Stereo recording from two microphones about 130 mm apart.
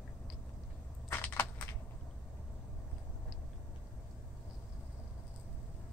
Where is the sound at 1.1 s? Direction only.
15° left (ahead or behind).